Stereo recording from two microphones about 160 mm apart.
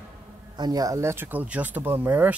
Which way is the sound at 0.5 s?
25° right (ahead or behind).